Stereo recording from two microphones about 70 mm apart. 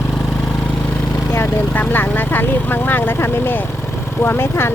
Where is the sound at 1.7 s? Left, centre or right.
Left.